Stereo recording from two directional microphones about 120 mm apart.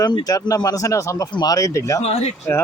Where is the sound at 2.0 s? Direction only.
65° left (ahead or behind).